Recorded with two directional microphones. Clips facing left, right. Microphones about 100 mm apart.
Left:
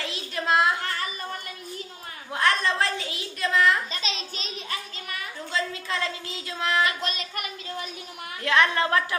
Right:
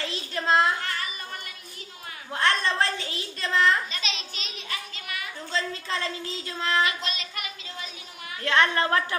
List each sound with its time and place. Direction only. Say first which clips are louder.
0.1 s a sound: even; 5° left (ahead or behind)
2.4 s a sound: left 1 dB; 5° left (ahead or behind)
4.0 s speech: left 2 dB; 35° left (ahead or behind)
5.5 s a woman's voice: even; 5° left (ahead or behind)
7.0 s speech: left 3 dB; 45° left (ahead or behind)
8.4 s a woman's voice: left 1 dB; centre (ahead or behind)